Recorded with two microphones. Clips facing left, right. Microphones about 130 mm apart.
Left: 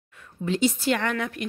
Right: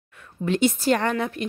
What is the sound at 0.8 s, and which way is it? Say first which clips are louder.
Speech: right 3 dB; 40° right (ahead or behind).